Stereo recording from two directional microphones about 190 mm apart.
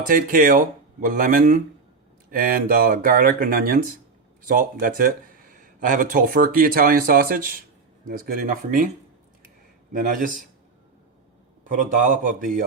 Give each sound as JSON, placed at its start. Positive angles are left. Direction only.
{"t": 0.1, "sound": "speech", "side_deg": -45}
{"t": 10.1, "sound": "speech", "side_deg": -45}
{"t": 11.6, "sound": "speech", "side_deg": -45}